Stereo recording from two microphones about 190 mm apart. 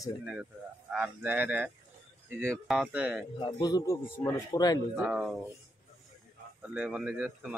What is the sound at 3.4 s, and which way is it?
Speech, 25° left (ahead or behind).